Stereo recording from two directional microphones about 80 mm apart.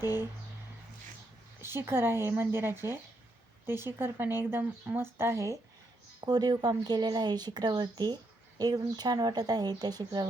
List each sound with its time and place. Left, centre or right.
1.6 s speech: right
6.2 s speech: right